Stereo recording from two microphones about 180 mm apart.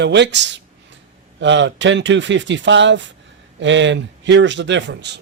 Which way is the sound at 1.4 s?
90° right.